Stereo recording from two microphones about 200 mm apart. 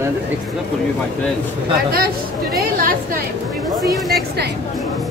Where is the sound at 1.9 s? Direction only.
50° right (ahead or behind).